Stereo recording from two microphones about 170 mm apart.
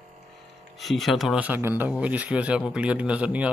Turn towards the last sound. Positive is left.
turn(degrees=-5)  # may be behind; listen again after turning